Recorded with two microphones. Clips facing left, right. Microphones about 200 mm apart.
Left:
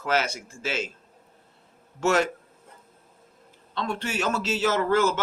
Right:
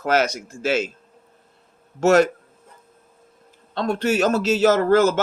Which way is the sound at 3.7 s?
40° right (ahead or behind).